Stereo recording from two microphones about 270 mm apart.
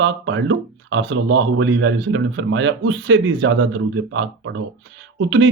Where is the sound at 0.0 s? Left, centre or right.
Right.